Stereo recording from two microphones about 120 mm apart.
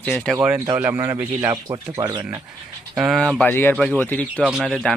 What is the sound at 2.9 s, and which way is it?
Speech, 5° right (ahead or behind).